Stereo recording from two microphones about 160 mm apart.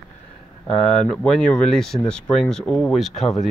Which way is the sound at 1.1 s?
5° left (ahead or behind).